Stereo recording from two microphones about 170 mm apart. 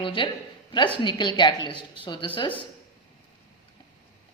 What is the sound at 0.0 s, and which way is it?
A woman's voice, 30° left (ahead or behind).